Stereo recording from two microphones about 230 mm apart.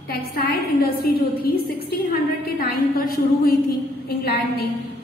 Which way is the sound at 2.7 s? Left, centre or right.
Left.